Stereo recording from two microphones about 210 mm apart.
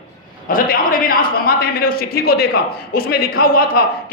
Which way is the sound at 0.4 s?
45° left (ahead or behind).